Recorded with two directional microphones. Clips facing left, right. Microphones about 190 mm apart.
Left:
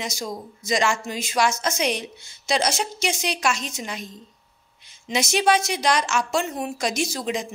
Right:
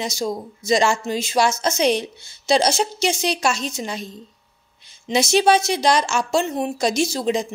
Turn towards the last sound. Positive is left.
turn(degrees=-30)  # may be behind; listen again after turning